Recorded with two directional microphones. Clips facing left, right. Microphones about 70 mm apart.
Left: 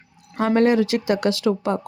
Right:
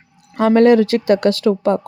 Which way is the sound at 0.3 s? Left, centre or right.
Right.